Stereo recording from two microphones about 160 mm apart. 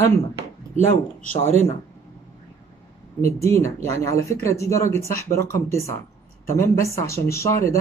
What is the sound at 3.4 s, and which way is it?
Speech, 15° left (ahead or behind).